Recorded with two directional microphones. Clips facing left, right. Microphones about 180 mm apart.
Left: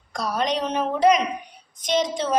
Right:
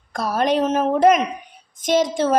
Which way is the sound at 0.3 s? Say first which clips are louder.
Right 6 dB; 50° right (ahead or behind).